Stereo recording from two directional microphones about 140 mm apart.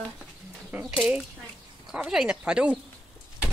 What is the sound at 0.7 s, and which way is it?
Speech, 10° right (ahead or behind).